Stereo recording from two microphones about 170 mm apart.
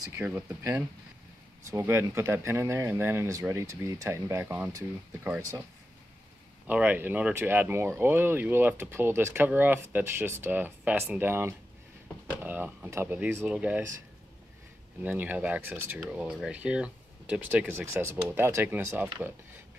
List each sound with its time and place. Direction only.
0.2 s speech: 10° right (ahead or behind)
6.7 s speech: 10° right (ahead or behind)
15.0 s speech: 10° right (ahead or behind)